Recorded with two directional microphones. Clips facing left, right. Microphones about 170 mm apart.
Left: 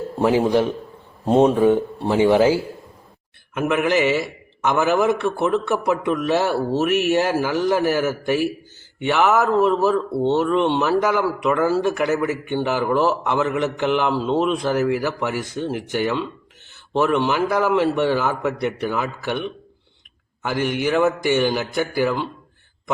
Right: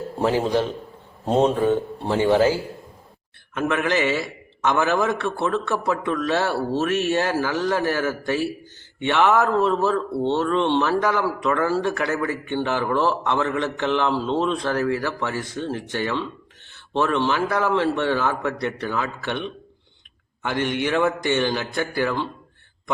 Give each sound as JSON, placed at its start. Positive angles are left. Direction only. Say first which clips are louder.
{"t": 0.3, "sound": "speech", "louder": "left 4 dB", "side_deg": 15}